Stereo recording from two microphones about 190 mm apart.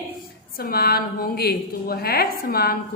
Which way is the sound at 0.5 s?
50° left (ahead or behind).